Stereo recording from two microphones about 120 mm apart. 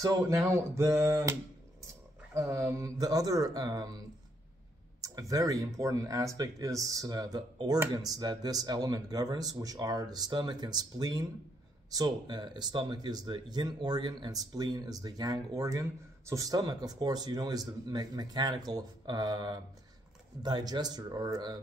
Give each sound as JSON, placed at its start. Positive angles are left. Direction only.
{"t": 0.0, "sound": "speech", "side_deg": -30}
{"t": 2.3, "sound": "speech", "side_deg": -25}
{"t": 5.3, "sound": "speech", "side_deg": -30}